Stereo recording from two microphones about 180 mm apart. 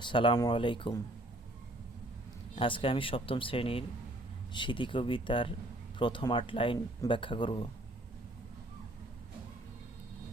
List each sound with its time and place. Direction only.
0.0 s speech: 25° left (ahead or behind)
2.6 s speech: 30° left (ahead or behind)